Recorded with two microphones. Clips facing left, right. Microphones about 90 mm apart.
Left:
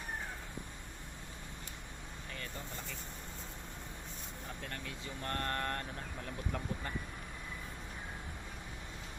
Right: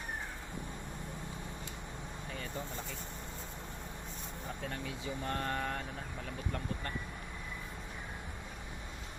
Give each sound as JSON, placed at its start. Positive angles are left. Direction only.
{"t": 2.3, "sound": "vehicle", "side_deg": -5}
{"t": 4.6, "sound": "speech", "side_deg": -5}